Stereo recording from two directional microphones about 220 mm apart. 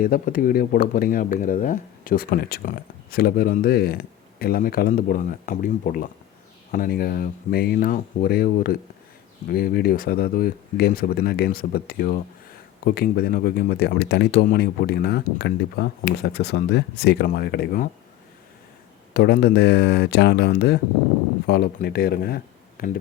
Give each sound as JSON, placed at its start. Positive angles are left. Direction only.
{"t": 0.0, "sound": "speech", "side_deg": 40}
{"t": 19.1, "sound": "speech", "side_deg": 45}